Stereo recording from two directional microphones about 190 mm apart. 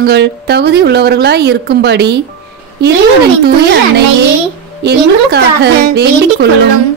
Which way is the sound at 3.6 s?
60° right (ahead or behind).